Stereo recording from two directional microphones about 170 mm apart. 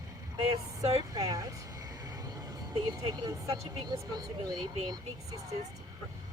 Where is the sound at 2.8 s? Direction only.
25° right (ahead or behind).